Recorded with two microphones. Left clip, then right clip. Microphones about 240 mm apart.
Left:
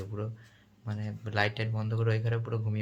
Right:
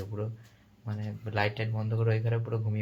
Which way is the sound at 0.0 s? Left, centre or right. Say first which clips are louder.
Right 1 dB; centre.